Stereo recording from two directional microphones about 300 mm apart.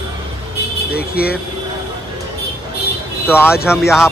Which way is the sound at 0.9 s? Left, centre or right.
Left.